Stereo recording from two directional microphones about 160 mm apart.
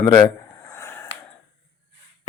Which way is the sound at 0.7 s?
20° left (ahead or behind).